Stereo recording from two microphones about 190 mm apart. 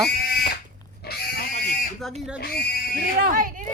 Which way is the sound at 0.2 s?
55° left (ahead or behind).